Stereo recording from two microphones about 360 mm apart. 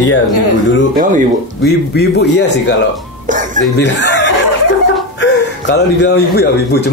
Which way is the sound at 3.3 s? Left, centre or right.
Right.